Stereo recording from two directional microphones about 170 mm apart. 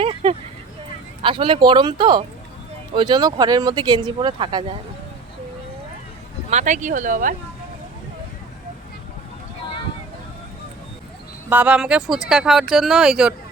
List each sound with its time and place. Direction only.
0.0 s a sound: 35° right (ahead or behind)
1.2 s speech: 30° right (ahead or behind)
6.5 s speech: 45° right (ahead or behind)
11.4 s speech: 10° right (ahead or behind)